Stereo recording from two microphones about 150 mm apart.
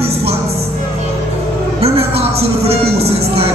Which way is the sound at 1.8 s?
40° right (ahead or behind).